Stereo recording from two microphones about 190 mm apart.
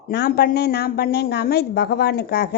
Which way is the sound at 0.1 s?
60° left (ahead or behind).